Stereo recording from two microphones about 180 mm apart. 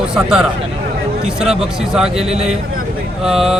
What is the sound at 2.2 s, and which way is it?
Speech, 35° right (ahead or behind).